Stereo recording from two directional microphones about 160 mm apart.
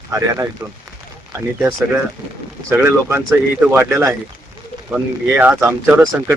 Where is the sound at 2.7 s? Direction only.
15° right (ahead or behind).